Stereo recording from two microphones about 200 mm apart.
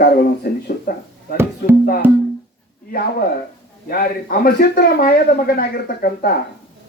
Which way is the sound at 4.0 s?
45° left (ahead or behind).